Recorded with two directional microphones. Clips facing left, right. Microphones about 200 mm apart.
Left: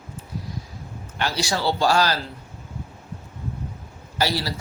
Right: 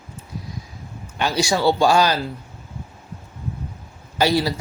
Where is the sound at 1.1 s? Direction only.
15° right (ahead or behind).